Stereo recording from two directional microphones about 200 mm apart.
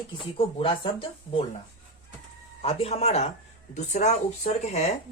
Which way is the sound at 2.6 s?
30° left (ahead or behind).